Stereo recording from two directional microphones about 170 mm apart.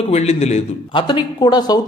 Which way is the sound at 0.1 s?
40° left (ahead or behind).